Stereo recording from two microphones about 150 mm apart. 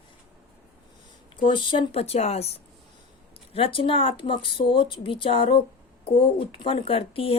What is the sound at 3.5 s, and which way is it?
Speech, 35° left (ahead or behind).